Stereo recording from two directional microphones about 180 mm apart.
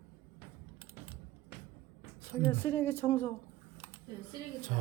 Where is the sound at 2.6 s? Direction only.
10° left (ahead or behind).